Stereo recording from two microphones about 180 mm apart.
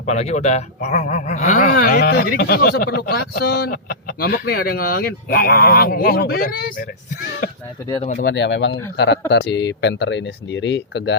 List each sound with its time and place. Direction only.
0.0 s speech: 40° left (ahead or behind)
8.2 s speech: 75° left (ahead or behind)